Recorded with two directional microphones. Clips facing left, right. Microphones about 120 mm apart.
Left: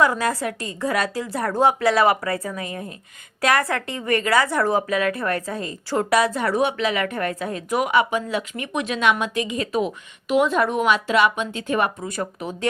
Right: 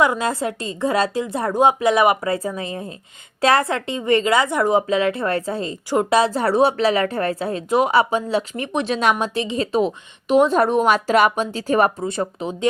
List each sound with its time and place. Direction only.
0.0 s a woman's voice: 20° right (ahead or behind)